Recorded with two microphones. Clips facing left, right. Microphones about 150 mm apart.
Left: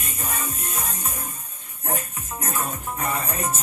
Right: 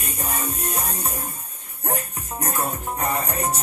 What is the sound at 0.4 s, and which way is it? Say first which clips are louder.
Music: right 3 dB; 35° right (ahead or behind).